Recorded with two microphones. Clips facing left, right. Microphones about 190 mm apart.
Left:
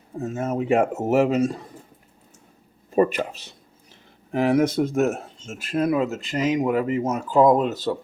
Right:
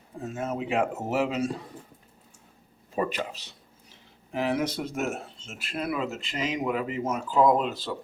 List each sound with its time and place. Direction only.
0.2 s speech: 45° left (ahead or behind)
2.9 s speech: 50° left (ahead or behind)